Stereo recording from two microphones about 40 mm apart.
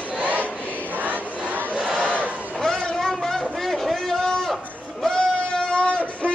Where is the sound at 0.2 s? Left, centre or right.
Right.